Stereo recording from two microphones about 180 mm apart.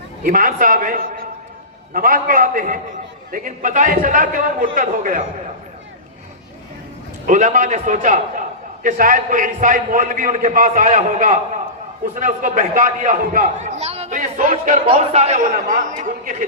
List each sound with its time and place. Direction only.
0.3 s a man's voice: 50° right (ahead or behind)
7.3 s a man's voice: 45° right (ahead or behind)
14.8 s a man's voice: 35° right (ahead or behind)